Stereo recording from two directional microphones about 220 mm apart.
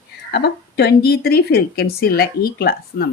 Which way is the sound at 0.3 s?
45° left (ahead or behind).